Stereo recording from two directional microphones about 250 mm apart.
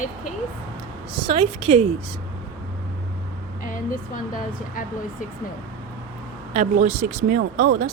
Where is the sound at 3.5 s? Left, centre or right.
Left.